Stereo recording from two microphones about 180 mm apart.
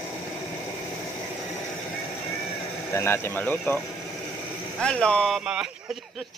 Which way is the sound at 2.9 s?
15° left (ahead or behind).